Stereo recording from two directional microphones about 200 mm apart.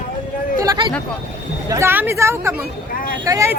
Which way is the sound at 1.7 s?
15° right (ahead or behind).